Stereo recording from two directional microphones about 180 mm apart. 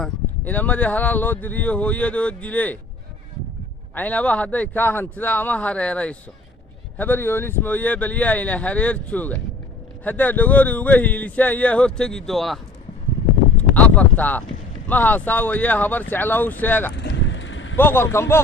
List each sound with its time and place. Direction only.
0.0 s speech: 10° left (ahead or behind)
3.9 s speech: 10° left (ahead or behind)
13.6 s a sound: 10° left (ahead or behind)
14.8 s speech: 10° left (ahead or behind)
16.9 s vehicle: 80° left
17.7 s speech: 10° left (ahead or behind)